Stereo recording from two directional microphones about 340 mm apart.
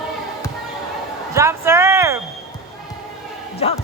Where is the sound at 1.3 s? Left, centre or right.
Centre.